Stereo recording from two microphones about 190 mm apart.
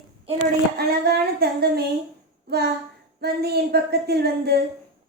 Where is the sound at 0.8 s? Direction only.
55° right (ahead or behind).